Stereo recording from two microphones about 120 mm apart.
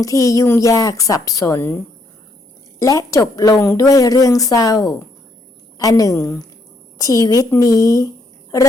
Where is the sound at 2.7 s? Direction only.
30° left (ahead or behind).